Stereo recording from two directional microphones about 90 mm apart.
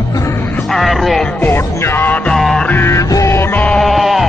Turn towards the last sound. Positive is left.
turn(degrees=0)  # may be behind; listen again after turning